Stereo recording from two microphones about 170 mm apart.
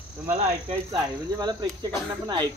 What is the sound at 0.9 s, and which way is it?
Speech, 25° right (ahead or behind).